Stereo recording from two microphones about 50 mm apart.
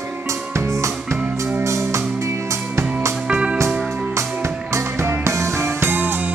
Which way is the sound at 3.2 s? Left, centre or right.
Right.